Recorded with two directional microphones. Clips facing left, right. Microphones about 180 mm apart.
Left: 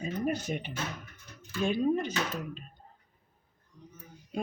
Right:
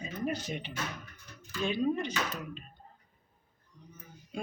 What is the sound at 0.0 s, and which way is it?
Speech, 50° left (ahead or behind).